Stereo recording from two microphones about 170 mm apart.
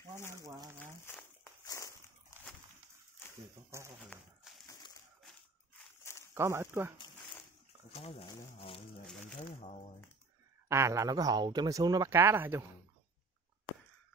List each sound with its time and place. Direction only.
0.4 s speech: 20° right (ahead or behind)
1.0 s walk: 15° left (ahead or behind)
3.7 s speech: 15° right (ahead or behind)
4.5 s a sound: 5° right (ahead or behind)
6.3 s speech: 15° right (ahead or behind)
7.9 s speech: 35° left (ahead or behind)
9.0 s a sound: 10° left (ahead or behind)
10.7 s speech: 15° right (ahead or behind)